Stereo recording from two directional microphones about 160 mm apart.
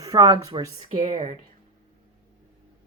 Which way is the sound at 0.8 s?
45° right (ahead or behind).